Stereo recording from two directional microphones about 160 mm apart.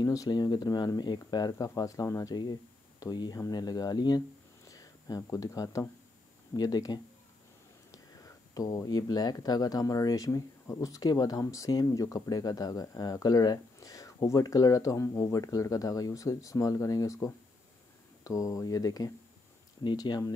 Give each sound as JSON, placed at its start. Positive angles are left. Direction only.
{"t": 0.0, "sound": "speech", "side_deg": 20}